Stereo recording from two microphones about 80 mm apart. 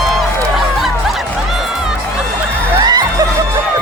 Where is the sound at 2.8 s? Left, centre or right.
Right.